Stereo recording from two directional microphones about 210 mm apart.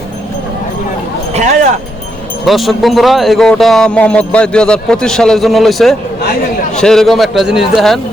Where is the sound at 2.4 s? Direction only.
Centre (ahead or behind).